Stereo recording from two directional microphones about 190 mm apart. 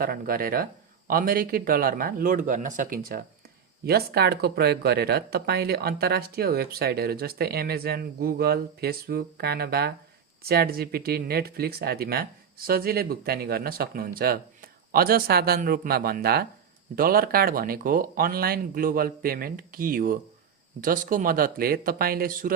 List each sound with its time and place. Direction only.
0.0 s speech: 50° right (ahead or behind)